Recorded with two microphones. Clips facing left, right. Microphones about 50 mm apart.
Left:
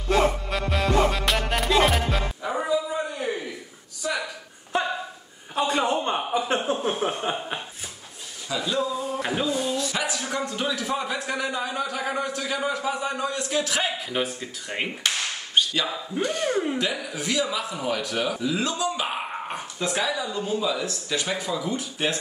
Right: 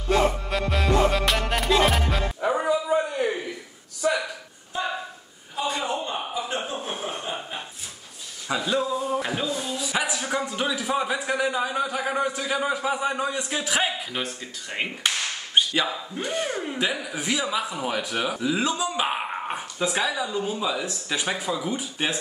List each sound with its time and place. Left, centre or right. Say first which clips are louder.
0.1 s music: even; centre
4.7 s a sound: left 3 dB; left
6.8 s chuckle: left 5 dB; left
8.5 s a sound: right 2 dB; right
9.2 s music: left 2 dB; centre
9.6 s a sound: left 1 dB; centre
14.1 s speech: left 3 dB; centre
15.0 s whip: even; centre
16.2 s speech: left 4 dB; centre